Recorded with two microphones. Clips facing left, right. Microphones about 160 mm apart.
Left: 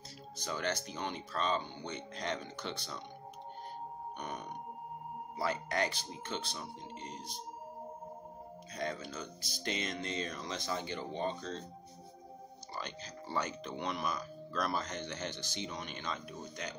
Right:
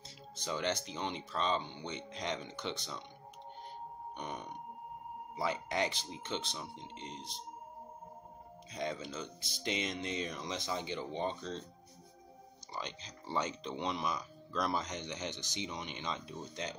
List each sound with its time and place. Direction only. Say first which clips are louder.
0.5 s speech: right 1 dB; 20° right (ahead or behind)
4.2 s speech: right 1 dB; 20° right (ahead or behind)
8.7 s speech: right 1 dB; 20° right (ahead or behind)
12.7 s speech: even; 20° right (ahead or behind)